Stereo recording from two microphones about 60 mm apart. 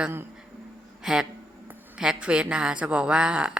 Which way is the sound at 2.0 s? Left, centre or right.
Centre.